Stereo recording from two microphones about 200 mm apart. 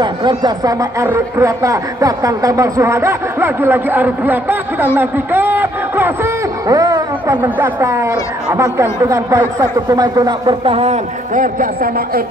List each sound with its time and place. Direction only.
0.0 s speech: 20° right (ahead or behind); by 12.2 s 45° right (ahead or behind)